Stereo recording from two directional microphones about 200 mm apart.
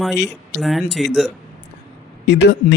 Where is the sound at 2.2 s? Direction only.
60° left (ahead or behind).